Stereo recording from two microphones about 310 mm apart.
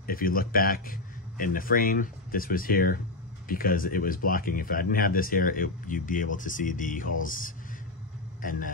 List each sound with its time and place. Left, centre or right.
0.0 s a man's voice: left